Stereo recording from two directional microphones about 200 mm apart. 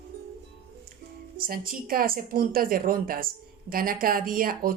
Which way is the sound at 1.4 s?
45° right (ahead or behind).